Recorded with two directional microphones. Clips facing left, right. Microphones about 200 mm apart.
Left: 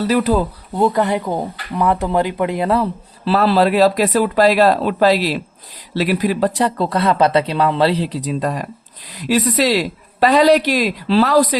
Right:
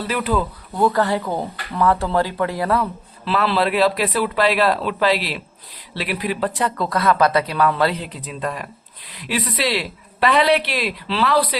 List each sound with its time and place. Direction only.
0.0 s speech: 40° left (ahead or behind)
0.8 s speech: 20° left (ahead or behind); by 11.5 s 45° left (ahead or behind)